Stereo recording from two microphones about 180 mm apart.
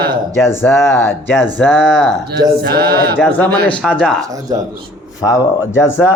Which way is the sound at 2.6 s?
65° right (ahead or behind).